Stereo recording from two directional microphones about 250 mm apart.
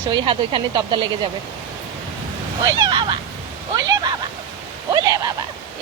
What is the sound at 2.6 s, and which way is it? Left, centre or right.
Speech, centre.